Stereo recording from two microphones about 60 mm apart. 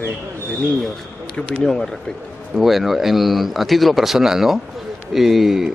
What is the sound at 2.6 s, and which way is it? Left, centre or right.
Speech, centre.